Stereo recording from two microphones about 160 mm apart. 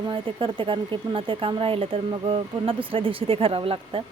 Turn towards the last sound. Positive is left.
turn(degrees=-35)  # may be behind; listen again after turning